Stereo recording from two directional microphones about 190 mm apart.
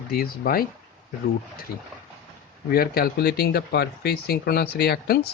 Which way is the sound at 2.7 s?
50° left (ahead or behind).